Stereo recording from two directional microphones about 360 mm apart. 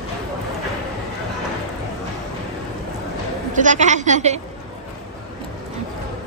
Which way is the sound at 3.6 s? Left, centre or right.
Centre.